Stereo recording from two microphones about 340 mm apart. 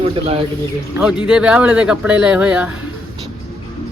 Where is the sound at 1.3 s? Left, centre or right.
Centre.